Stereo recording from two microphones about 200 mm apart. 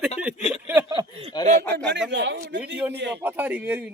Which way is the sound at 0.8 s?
15° right (ahead or behind).